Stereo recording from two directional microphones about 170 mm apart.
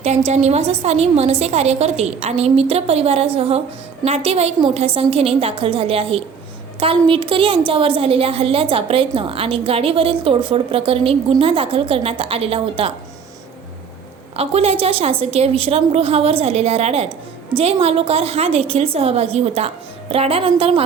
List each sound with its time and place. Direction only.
0.3 s a woman's voice: 40° right (ahead or behind)
14.3 s a woman's voice: 35° right (ahead or behind)